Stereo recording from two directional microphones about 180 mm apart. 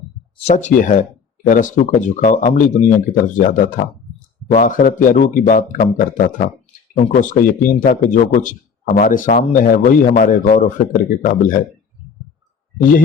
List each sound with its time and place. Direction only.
0.3 s a man's voice: 40° left (ahead or behind)